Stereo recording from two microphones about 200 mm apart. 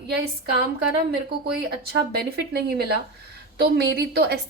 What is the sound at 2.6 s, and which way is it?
A woman's voice, 50° right (ahead or behind).